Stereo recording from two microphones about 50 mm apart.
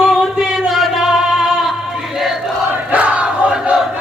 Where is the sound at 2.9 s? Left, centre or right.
Right.